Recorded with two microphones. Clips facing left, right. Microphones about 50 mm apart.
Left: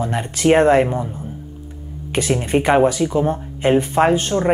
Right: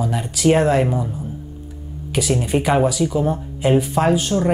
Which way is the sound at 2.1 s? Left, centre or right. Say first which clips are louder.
Left 1 dB; left.